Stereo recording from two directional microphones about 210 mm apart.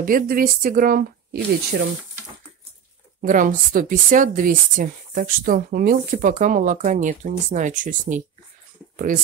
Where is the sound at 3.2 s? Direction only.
40° right (ahead or behind).